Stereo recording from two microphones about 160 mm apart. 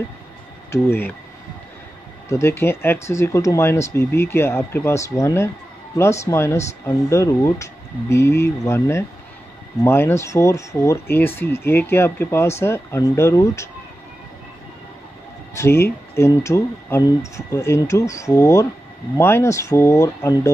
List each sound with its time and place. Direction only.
0.7 s speech: 15° left (ahead or behind)
2.2 s speech: 15° left (ahead or behind)
15.5 s speech: 15° left (ahead or behind)